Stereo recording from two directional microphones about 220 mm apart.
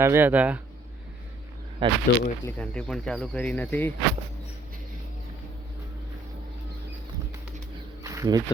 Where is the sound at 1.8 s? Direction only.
20° right (ahead or behind).